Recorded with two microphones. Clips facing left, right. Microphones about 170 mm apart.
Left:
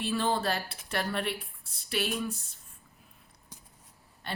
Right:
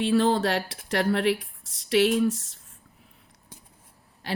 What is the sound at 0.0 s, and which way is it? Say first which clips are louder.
Speech: right 7 dB; 90° right.